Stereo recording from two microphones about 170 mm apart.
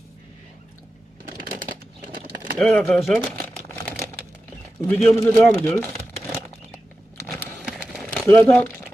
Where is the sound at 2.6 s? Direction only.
5° left (ahead or behind).